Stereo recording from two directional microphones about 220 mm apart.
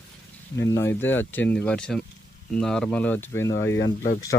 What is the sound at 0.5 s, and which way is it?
Speech, 15° left (ahead or behind).